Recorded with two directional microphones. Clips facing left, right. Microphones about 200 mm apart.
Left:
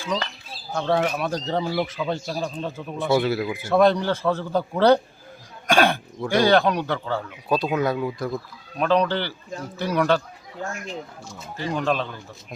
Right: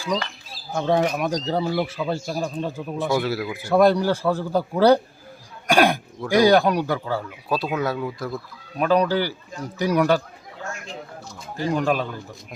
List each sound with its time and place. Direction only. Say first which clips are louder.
0.7 s speech: right 2 dB; 15° right (ahead or behind)
3.2 s speech: left 2 dB; centre (ahead or behind)
11.7 s speech: right 2 dB; 10° right (ahead or behind)